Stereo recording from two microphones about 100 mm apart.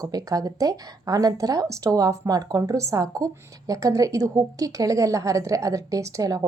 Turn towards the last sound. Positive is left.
turn(degrees=-35)  # may be behind; listen again after turning